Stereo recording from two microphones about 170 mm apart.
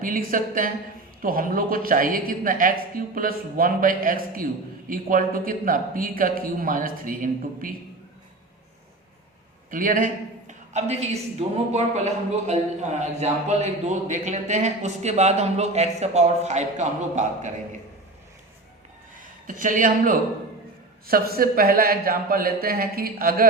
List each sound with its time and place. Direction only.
0.0 s speech: 55° right (ahead or behind)
9.6 s a woman's voice: 55° right (ahead or behind)
19.1 s a man's voice: 50° right (ahead or behind)